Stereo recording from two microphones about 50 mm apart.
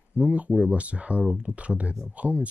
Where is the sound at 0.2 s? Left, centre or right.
Right.